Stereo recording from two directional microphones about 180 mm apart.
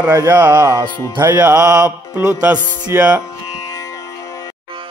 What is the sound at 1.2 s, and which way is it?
Music, 10° right (ahead or behind).